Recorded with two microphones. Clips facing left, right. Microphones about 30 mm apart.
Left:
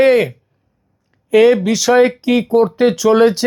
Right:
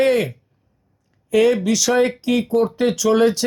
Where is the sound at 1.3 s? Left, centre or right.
Left.